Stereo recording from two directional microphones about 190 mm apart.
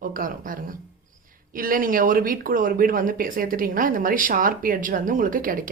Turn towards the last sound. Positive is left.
turn(degrees=-45)  # may be behind; listen again after turning